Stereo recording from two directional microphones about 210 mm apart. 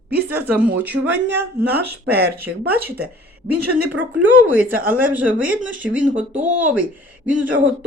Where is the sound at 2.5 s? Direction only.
75° right (ahead or behind).